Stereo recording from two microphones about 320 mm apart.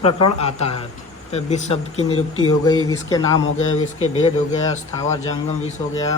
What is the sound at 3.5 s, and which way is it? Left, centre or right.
Speech, left.